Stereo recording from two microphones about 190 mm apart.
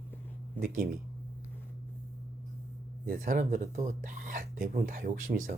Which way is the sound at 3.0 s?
45° right (ahead or behind).